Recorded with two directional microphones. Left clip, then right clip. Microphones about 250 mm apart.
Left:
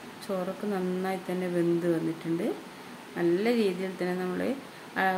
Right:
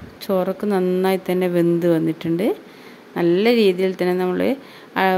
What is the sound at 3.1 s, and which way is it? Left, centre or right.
Speech, right.